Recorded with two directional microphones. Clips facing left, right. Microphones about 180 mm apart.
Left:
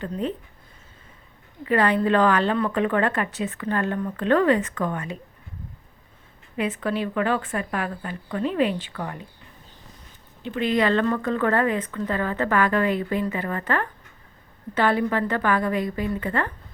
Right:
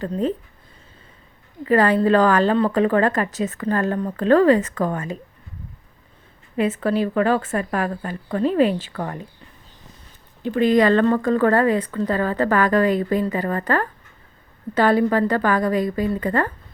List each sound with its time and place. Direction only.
0.0 s speech: 40° right (ahead or behind)
1.6 s speech: 40° right (ahead or behind)
6.6 s speech: 40° right (ahead or behind)
10.4 s speech: 40° right (ahead or behind)